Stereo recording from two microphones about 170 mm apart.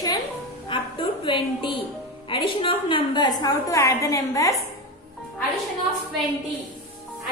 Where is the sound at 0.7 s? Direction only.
30° left (ahead or behind).